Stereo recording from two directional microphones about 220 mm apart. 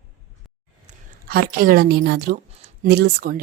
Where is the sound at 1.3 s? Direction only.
45° right (ahead or behind).